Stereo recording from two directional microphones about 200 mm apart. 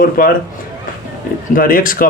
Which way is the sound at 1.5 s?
45° left (ahead or behind).